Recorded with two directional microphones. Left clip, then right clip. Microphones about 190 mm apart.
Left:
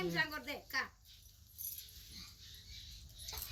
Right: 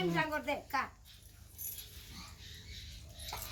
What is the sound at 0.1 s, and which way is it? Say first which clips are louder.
Speech: right 4 dB; 10° right (ahead or behind).